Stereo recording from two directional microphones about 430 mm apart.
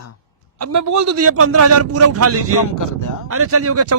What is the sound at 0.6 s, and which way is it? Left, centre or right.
A man's voice, right.